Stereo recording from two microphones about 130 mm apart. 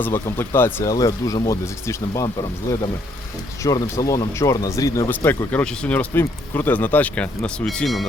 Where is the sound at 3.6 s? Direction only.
25° left (ahead or behind); by 8.0 s centre (ahead or behind).